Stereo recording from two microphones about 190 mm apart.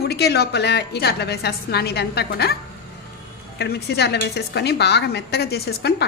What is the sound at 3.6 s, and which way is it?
A woman's voice, 60° left (ahead or behind).